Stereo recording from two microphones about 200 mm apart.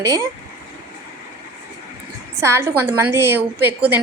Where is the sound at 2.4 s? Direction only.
10° right (ahead or behind).